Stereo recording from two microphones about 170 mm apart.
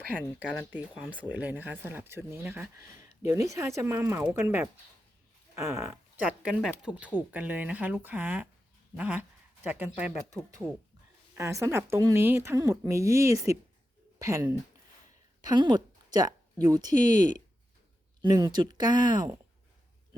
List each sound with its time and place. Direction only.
0.1 s speech: 5° left (ahead or behind)
1.1 s speech: 10° right (ahead or behind)
3.1 s a sound: 15° right (ahead or behind)
3.5 s speech: 15° right (ahead or behind)
11.3 s a woman's voice: 15° right (ahead or behind)